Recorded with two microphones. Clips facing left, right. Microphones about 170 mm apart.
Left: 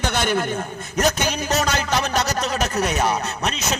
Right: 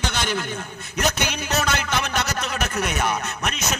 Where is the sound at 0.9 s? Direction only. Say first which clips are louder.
Left 4 dB; 40° left (ahead or behind).